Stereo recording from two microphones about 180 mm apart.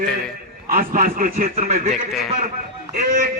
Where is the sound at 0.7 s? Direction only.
50° right (ahead or behind).